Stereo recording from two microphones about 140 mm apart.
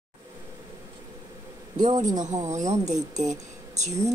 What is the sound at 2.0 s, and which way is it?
Speech, 60° right (ahead or behind).